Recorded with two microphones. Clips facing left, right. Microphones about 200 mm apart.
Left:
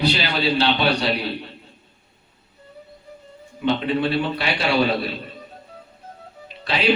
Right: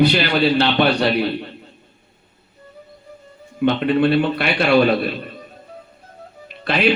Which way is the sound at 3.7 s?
60° right (ahead or behind).